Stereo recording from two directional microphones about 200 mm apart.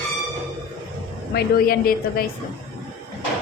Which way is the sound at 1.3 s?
50° left (ahead or behind).